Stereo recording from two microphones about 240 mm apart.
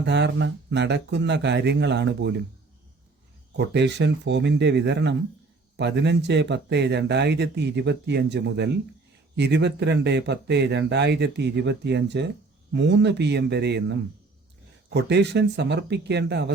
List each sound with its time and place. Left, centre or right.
0.0 s speech: right
3.6 s speech: right